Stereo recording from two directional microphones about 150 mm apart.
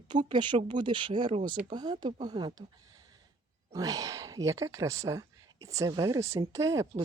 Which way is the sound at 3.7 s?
25° right (ahead or behind).